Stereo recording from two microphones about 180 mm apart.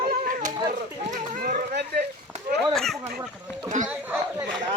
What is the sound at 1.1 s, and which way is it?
Livestock, 45° right (ahead or behind).